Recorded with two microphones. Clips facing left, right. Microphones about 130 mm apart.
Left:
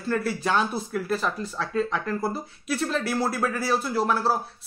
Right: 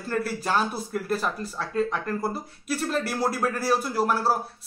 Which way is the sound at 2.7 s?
5° right (ahead or behind).